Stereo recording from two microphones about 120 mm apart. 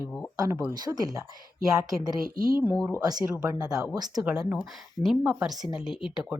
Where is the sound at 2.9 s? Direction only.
30° right (ahead or behind).